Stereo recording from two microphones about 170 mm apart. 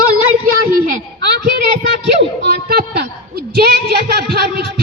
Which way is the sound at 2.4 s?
70° right (ahead or behind).